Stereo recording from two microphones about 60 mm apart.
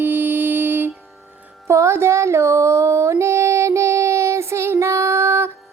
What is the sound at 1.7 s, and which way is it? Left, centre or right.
Music, right.